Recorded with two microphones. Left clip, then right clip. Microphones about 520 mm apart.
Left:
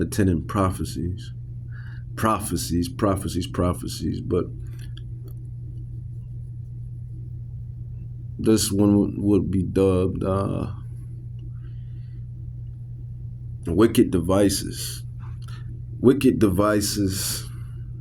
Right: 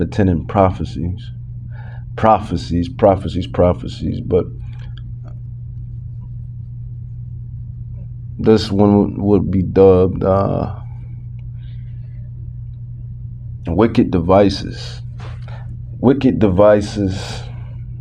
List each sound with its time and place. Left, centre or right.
0.0 s speech: left
2.1 s speech: left
8.6 s speech: left
13.7 s speech: left
16.0 s speech: left